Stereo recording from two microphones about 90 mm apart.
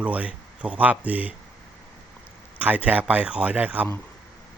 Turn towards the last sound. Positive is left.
turn(degrees=-15)  # may be behind; listen again after turning